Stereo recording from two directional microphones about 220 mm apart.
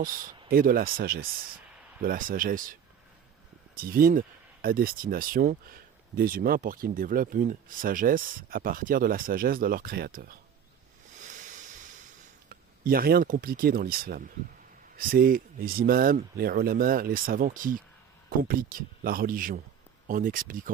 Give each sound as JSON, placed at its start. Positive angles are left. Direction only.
{"t": 0.5, "sound": "speech", "side_deg": -40}
{"t": 3.8, "sound": "speech", "side_deg": -40}
{"t": 11.1, "sound": "a sound", "side_deg": -35}
{"t": 12.5, "sound": "speech", "side_deg": -40}